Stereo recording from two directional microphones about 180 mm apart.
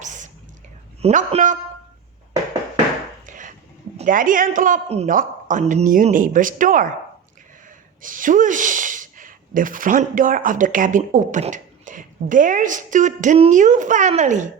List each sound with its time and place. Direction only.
0.0 s a sound: 45° right (ahead or behind)
1.0 s speech: 40° right (ahead or behind)
3.2 s dishes: 45° right (ahead or behind)
3.9 s speech: 50° right (ahead or behind)
8.0 s speech: 50° right (ahead or behind)